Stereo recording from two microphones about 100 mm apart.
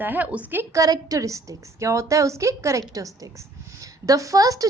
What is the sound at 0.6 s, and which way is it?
A woman's voice, 35° right (ahead or behind).